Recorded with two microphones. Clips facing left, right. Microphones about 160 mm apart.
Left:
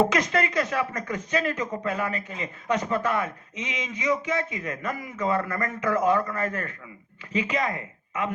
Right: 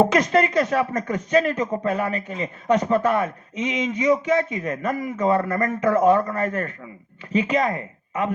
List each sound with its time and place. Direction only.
0.0 s speech: 40° right (ahead or behind)